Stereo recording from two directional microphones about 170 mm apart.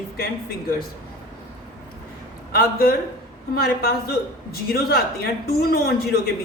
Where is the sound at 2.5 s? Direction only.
60° left (ahead or behind).